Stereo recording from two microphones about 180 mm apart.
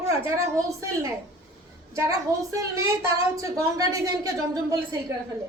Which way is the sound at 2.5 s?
15° right (ahead or behind).